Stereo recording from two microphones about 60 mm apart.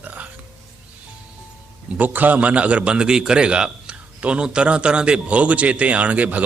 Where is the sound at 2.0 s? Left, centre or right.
Right.